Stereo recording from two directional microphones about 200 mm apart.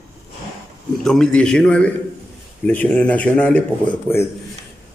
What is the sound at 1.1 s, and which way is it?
A man's voice, 5° left (ahead or behind).